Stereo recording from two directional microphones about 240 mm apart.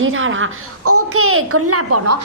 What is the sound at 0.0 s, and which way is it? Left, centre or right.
A woman's voice, right.